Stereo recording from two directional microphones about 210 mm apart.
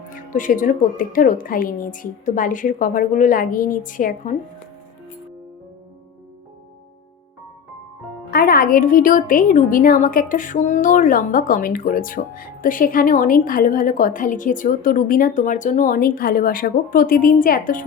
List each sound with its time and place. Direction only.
0.1 s a woman's voice: 40° left (ahead or behind)
8.3 s a woman's voice: 45° left (ahead or behind)